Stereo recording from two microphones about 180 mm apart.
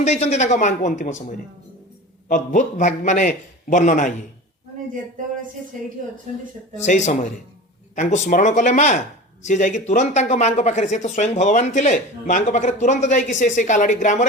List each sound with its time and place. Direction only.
0.0 s speech: 35° left (ahead or behind)
6.7 s speech: 40° left (ahead or behind)